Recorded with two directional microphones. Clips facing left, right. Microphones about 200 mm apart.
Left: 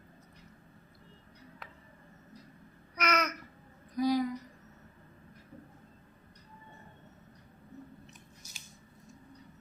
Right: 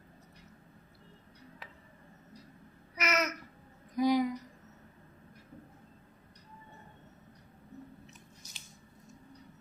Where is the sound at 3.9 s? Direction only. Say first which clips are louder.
Right 1 dB; 20° right (ahead or behind).